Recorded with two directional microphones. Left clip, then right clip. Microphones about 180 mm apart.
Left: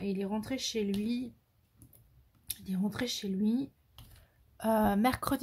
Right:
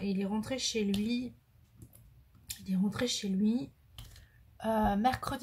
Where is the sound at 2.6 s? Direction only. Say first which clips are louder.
Right 2 dB; 35° left (ahead or behind).